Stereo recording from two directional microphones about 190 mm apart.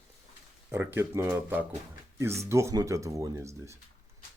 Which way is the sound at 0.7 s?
15° right (ahead or behind).